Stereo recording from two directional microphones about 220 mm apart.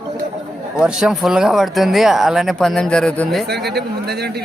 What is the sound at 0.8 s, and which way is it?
Speech, 5° right (ahead or behind).